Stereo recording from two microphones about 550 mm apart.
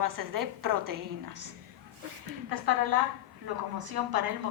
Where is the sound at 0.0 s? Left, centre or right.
Right.